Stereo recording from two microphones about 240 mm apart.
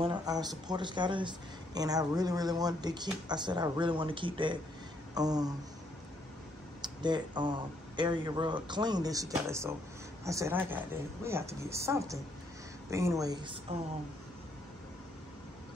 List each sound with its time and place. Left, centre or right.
0.0 s speech: centre
6.8 s speech: centre